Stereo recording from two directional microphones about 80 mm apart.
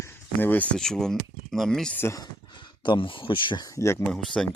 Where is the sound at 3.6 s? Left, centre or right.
Left.